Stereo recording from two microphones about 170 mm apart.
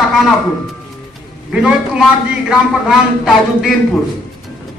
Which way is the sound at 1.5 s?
5° right (ahead or behind).